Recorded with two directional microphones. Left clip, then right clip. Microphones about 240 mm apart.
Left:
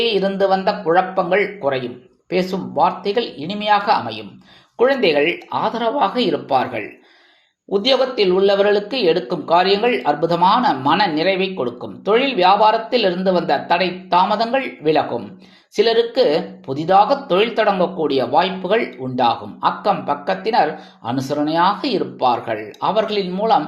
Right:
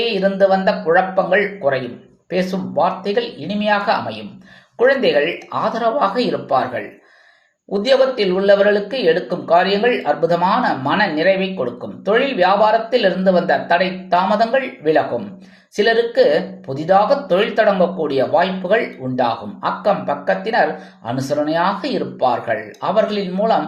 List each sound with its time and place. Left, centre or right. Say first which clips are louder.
0.2 s speech: right 2 dB; left